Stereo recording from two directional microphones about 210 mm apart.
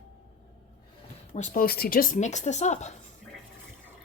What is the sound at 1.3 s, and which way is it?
Speech, 40° left (ahead or behind).